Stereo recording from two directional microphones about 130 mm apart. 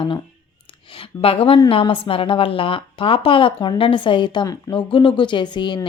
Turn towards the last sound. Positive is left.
turn(degrees=35)  # may be behind; listen again after turning